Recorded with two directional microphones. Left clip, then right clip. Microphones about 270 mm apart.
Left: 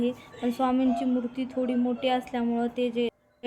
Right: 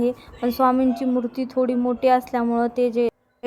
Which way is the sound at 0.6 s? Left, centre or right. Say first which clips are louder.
Right 7 dB; centre.